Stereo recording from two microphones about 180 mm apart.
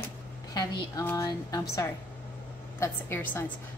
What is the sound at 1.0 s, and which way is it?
A woman's voice, 10° left (ahead or behind).